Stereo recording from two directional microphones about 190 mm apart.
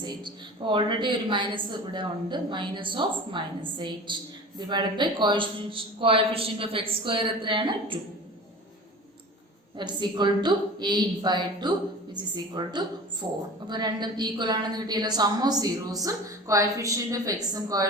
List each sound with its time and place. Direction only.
0.0 s a woman's voice: 25° right (ahead or behind)
9.7 s a woman's voice: 25° right (ahead or behind)